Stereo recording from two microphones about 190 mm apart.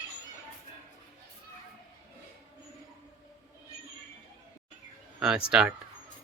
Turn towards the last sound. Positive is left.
turn(degrees=-5)  # may be behind; listen again after turning